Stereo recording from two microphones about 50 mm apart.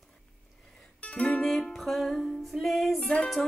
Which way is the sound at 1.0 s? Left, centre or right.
Left.